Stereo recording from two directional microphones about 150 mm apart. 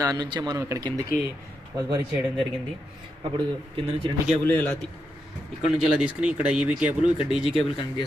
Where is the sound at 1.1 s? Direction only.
70° left (ahead or behind).